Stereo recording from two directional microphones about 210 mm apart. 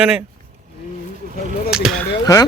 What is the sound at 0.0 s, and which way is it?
Speech, 5° right (ahead or behind).